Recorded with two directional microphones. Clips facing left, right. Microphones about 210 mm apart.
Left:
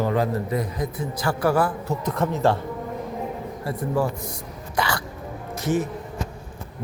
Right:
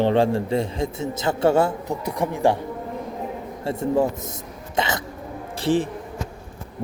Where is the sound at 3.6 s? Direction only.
25° right (ahead or behind).